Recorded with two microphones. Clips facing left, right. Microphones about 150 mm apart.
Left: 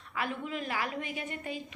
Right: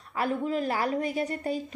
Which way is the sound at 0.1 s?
40° right (ahead or behind).